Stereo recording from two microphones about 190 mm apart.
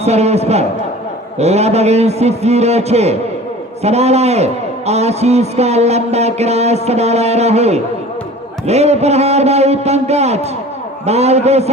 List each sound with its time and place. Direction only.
0.0 s a man's voice: 35° right (ahead or behind)